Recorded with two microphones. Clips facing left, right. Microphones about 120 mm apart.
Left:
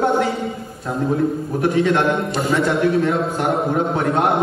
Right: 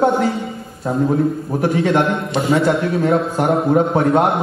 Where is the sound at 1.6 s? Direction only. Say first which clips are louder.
Right 1 dB; 30° right (ahead or behind).